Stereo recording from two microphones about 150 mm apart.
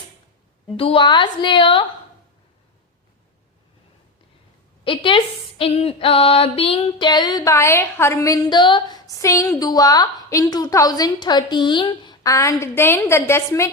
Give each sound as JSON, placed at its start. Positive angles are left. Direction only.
{"t": 0.8, "sound": "a woman's voice", "side_deg": 35}
{"t": 4.8, "sound": "speech", "side_deg": 35}